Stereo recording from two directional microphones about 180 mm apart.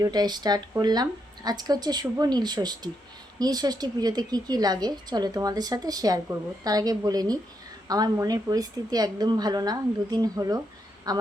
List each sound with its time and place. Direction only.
0.0 s a woman's voice: 20° right (ahead or behind)